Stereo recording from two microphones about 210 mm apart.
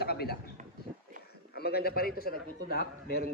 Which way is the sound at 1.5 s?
50° left (ahead or behind).